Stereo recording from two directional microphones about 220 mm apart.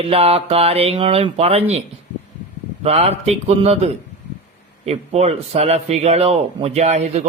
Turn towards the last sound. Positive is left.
turn(degrees=-30)  # may be behind; listen again after turning